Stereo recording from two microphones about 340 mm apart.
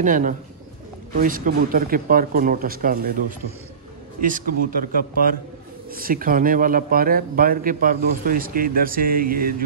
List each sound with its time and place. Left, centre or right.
0.0 s a man's voice: right
4.6 s a man's voice: right